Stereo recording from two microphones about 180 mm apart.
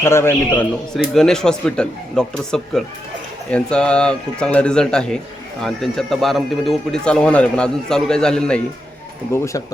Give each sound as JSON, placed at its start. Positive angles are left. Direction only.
{"t": 0.0, "sound": "a man's voice", "side_deg": 15}
{"t": 9.3, "sound": "a man's voice", "side_deg": 15}